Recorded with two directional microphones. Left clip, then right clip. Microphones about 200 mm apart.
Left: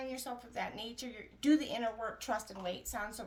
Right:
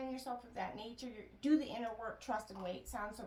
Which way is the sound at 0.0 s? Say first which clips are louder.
Left 2 dB; 40° left (ahead or behind).